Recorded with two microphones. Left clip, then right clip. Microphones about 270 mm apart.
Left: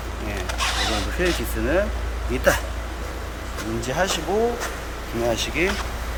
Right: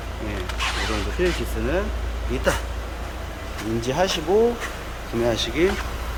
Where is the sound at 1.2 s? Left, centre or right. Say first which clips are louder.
Even; centre.